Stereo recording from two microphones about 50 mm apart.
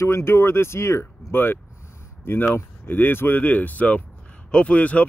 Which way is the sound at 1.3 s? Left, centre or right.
Left.